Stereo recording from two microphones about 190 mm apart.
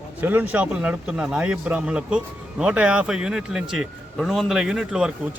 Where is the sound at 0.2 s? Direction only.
10° right (ahead or behind).